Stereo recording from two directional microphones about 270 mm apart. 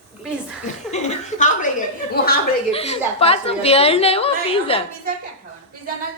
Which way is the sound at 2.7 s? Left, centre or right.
Left.